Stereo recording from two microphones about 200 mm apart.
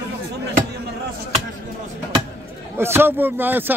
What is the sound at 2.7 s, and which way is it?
A man's voice, 10° right (ahead or behind).